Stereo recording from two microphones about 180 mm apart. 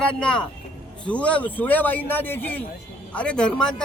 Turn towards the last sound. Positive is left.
turn(degrees=5)  # may be behind; listen again after turning